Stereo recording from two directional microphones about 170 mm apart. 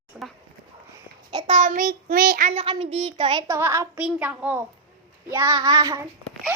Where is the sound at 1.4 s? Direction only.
45° right (ahead or behind).